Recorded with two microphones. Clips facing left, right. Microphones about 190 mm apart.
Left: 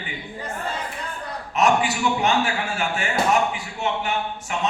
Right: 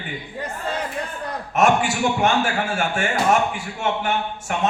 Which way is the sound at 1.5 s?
50° right (ahead or behind).